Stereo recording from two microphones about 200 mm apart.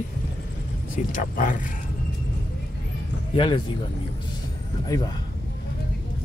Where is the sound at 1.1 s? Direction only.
40° left (ahead or behind).